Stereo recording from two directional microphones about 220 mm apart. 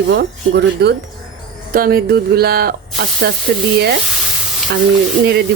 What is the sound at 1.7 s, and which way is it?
Speech, 40° right (ahead or behind).